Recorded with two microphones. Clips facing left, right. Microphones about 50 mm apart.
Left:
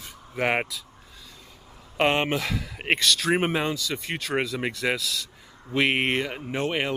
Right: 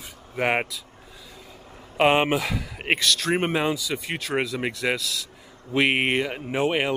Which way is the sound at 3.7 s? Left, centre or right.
Centre.